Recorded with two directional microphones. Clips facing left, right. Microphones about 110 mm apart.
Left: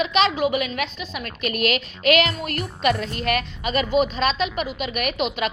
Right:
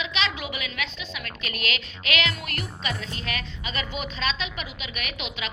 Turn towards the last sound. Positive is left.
turn(degrees=50)  # may be behind; listen again after turning